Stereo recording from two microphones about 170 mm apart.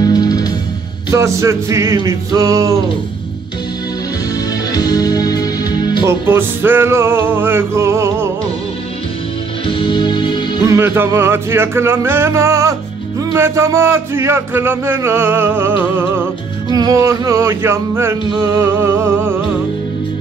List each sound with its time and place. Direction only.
0.0 s music: 25° left (ahead or behind)
1.1 s speech: 15° right (ahead or behind)
4.7 s music: 20° left (ahead or behind)
6.0 s speech: 15° right (ahead or behind)
9.7 s music: 30° left (ahead or behind)
10.6 s speech: 15° right (ahead or behind)